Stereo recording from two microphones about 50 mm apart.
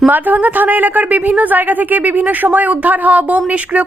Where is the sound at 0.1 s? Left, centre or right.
Right.